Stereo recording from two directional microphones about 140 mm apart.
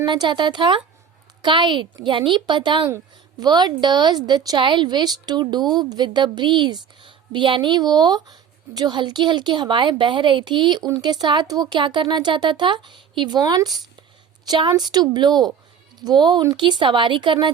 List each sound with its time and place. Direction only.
0.0 s a woman's voice: 30° right (ahead or behind)